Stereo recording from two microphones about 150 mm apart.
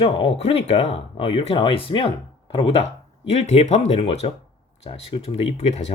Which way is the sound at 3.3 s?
45° left (ahead or behind).